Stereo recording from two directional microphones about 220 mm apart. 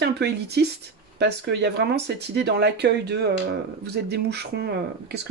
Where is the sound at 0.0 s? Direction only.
50° right (ahead or behind).